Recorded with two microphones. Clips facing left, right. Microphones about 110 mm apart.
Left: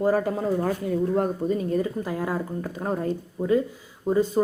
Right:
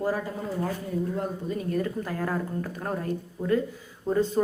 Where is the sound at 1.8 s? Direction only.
15° left (ahead or behind).